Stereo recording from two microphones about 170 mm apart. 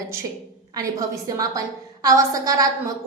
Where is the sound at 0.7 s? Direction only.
20° right (ahead or behind).